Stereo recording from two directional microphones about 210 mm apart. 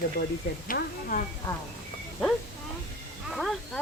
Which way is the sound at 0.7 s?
40° left (ahead or behind).